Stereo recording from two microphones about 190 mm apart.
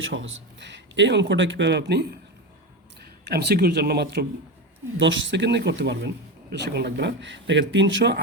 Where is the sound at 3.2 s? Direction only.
60° right (ahead or behind).